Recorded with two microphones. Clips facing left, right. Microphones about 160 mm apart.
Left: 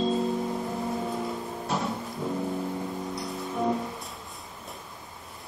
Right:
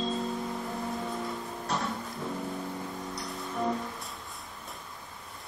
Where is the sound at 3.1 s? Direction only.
Centre (ahead or behind).